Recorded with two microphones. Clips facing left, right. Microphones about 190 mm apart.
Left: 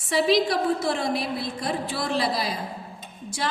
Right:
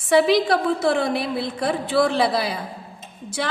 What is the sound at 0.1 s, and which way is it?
A woman's voice, 60° right (ahead or behind).